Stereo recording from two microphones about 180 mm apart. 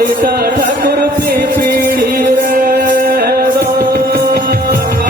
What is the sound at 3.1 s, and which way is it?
Music, 55° right (ahead or behind).